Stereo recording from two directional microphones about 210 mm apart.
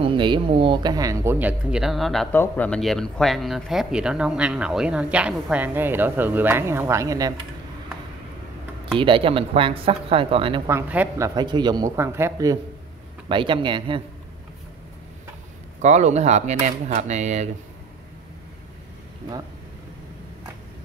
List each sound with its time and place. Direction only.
0.0 s speech: 25° right (ahead or behind)
8.9 s speech: 25° right (ahead or behind)
10.7 s speech: 10° right (ahead or behind)
15.8 s speech: 35° right (ahead or behind)